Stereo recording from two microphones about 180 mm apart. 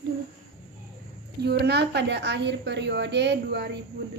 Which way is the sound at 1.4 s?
65° right (ahead or behind).